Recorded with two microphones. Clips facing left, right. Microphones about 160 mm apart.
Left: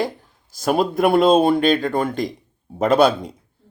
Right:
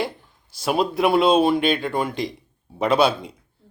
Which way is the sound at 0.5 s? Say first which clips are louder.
Left 3 dB; 45° left (ahead or behind).